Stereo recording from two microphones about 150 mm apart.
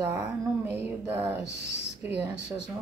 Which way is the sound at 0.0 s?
15° right (ahead or behind).